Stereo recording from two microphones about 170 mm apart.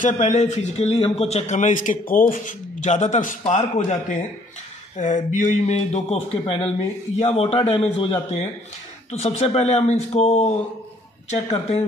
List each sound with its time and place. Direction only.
0.0 s a man's voice: 45° left (ahead or behind)
4.9 s speech: 45° left (ahead or behind)